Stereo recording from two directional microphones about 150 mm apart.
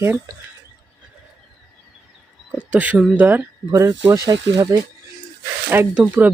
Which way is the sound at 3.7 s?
25° right (ahead or behind).